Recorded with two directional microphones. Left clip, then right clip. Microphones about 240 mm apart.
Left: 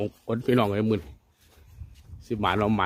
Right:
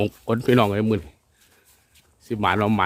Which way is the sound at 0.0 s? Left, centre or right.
Right.